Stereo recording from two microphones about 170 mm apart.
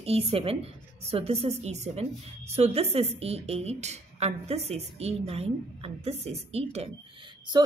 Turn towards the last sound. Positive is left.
turn(degrees=-30)  # may be behind; listen again after turning